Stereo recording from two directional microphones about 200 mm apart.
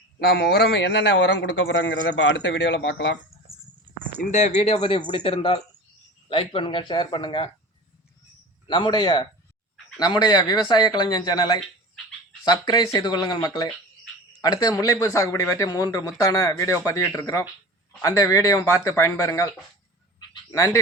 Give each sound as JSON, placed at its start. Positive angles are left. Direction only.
{"t": 0.2, "sound": "a man's voice", "side_deg": 55}
{"t": 4.2, "sound": "speech", "side_deg": 35}
{"t": 8.6, "sound": "speech", "side_deg": 20}
{"t": 20.3, "sound": "a sound", "side_deg": 15}